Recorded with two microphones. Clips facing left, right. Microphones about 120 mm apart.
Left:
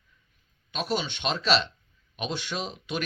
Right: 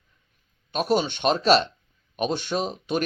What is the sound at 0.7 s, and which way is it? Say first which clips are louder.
A man's voice: right 7 dB; 45° right (ahead or behind).